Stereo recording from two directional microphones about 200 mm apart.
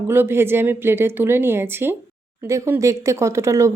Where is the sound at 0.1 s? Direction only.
10° right (ahead or behind).